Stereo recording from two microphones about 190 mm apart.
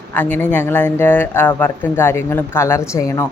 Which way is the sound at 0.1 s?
10° left (ahead or behind).